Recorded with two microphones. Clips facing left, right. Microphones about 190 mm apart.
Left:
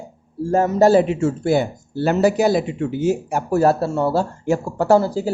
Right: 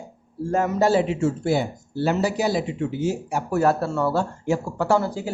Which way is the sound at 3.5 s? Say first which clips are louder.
Left 4 dB; 30° left (ahead or behind).